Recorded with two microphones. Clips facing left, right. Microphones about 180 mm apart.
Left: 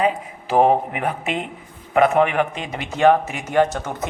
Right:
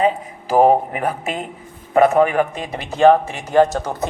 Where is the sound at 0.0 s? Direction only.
40° right (ahead or behind).